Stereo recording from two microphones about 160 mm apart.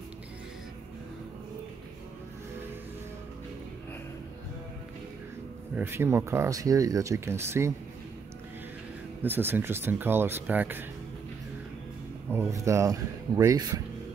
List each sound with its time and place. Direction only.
5.8 s speech: 15° right (ahead or behind)
9.2 s speech: 15° right (ahead or behind)
12.3 s speech: 15° right (ahead or behind)